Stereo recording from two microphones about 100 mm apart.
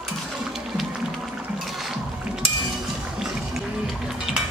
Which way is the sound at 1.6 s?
Centre (ahead or behind).